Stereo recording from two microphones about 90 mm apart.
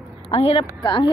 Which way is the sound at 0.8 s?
65° left (ahead or behind).